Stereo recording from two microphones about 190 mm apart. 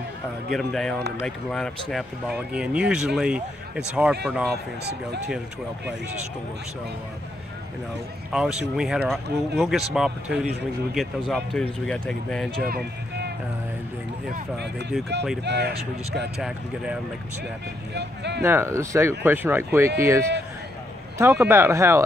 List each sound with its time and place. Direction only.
0.5 s speech: centre (ahead or behind)
8.3 s speech: 5° right (ahead or behind)
12.6 s music: 55° right (ahead or behind)
15.4 s speech: 60° right (ahead or behind)
16.3 s speech: 5° right (ahead or behind)
17.9 s speech: 65° right (ahead or behind)
18.4 s speech: 15° right (ahead or behind)